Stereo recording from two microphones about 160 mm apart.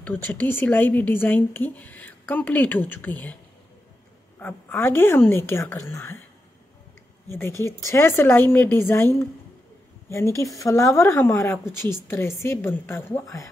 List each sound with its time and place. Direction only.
0.0 s a woman's voice: 10° left (ahead or behind)
4.4 s a woman's voice: 10° left (ahead or behind)
7.2 s a woman's voice: 15° left (ahead or behind)